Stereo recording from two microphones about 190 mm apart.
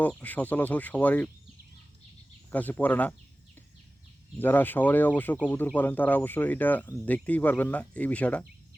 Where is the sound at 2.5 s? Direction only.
10° left (ahead or behind).